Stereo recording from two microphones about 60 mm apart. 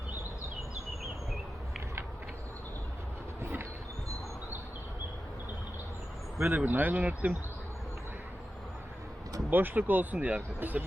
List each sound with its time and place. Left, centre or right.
3.4 s train: right
6.4 s speech: right
9.5 s speech: right